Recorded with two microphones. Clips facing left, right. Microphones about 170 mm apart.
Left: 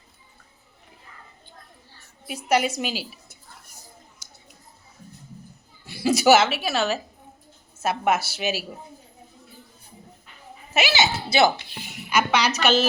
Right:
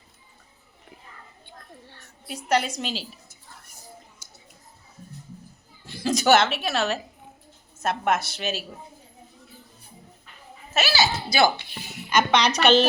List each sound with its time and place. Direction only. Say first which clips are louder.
2.3 s a woman's voice: left 2 dB; 10° left (ahead or behind)
5.8 s a woman's voice: left 4 dB; 10° left (ahead or behind)
10.8 s speech: left 1 dB; 20° left (ahead or behind)
12.0 s a woman's voice: right 1 dB; 5° left (ahead or behind)